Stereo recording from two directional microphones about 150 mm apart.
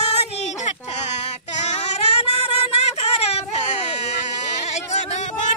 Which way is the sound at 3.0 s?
45° left (ahead or behind).